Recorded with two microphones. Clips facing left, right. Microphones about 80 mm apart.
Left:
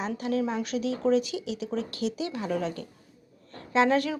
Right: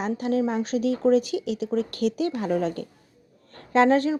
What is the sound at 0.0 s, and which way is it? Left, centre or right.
A woman's voice, right.